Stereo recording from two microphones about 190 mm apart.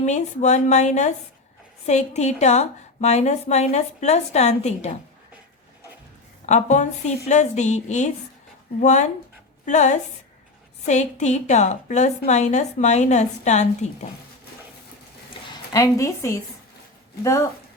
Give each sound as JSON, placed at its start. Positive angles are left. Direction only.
{"t": 0.0, "sound": "a woman's voice", "side_deg": 40}
{"t": 6.4, "sound": "a woman's voice", "side_deg": 40}
{"t": 15.7, "sound": "a woman's voice", "side_deg": 15}